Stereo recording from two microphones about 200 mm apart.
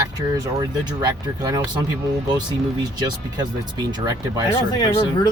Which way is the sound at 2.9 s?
20° right (ahead or behind).